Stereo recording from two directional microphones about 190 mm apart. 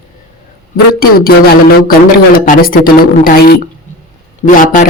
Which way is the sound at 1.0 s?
50° left (ahead or behind).